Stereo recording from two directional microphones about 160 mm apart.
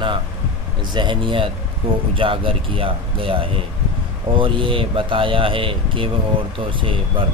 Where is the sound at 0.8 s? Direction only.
30° right (ahead or behind).